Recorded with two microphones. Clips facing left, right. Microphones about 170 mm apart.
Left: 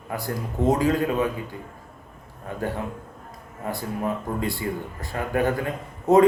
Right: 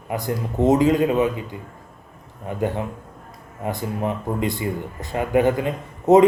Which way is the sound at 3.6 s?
20° right (ahead or behind).